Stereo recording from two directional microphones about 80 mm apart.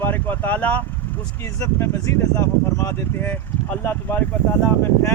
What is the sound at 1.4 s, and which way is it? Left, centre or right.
Speech, left.